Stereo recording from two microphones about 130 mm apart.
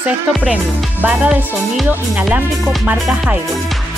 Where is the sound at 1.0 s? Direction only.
10° right (ahead or behind).